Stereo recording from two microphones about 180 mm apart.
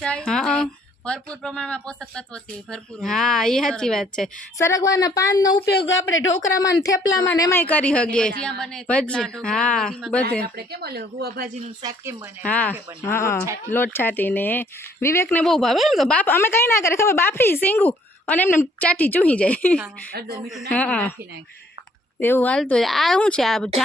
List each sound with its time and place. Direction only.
0.0 s a woman's voice: 5° left (ahead or behind)
4.5 s speech: 15° left (ahead or behind)
5.6 s a man's voice: 70° left (ahead or behind)
6.1 s speech: 90° left
6.5 s speech: 20° left (ahead or behind)
7.7 s a woman's voice: 5° left (ahead or behind)
10.4 s a woman's voice: 60° right (ahead or behind)
11.8 s speech: 20° right (ahead or behind)
12.4 s speech: 10° left (ahead or behind)
22.2 s a woman's voice: 10° left (ahead or behind)